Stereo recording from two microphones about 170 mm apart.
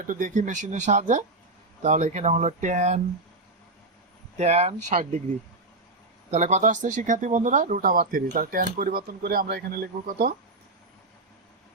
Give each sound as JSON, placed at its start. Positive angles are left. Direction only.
{"t": 0.0, "sound": "speech", "side_deg": -50}
{"t": 4.4, "sound": "speech", "side_deg": -40}
{"t": 6.3, "sound": "speech", "side_deg": -45}